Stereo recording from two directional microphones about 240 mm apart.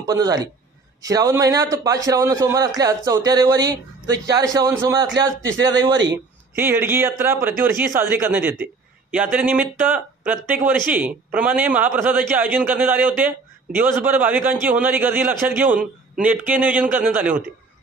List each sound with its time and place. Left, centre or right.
0.0 s a man's voice: centre
15.0 s a man's voice: right
15.3 s a man's voice: centre